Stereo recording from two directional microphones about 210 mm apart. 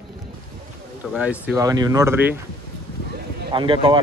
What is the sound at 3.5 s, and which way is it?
Speech, 25° right (ahead or behind).